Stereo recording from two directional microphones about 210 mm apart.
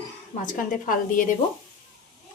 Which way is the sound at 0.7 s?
40° left (ahead or behind).